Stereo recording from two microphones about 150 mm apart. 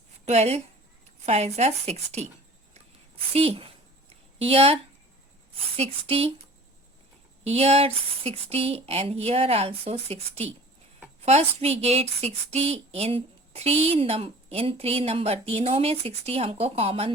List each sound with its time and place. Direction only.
0.3 s a woman's voice: 45° right (ahead or behind)
3.3 s a woman's voice: 40° right (ahead or behind)
7.4 s a woman's voice: 45° right (ahead or behind)